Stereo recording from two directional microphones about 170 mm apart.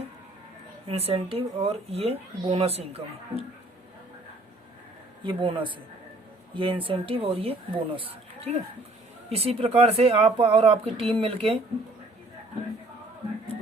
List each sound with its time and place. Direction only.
0.9 s speech: 35° right (ahead or behind)
5.2 s speech: 30° right (ahead or behind)